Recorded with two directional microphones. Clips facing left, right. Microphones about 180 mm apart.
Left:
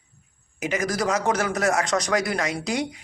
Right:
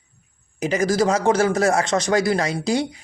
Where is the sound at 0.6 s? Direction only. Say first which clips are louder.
Right 6 dB; 30° right (ahead or behind).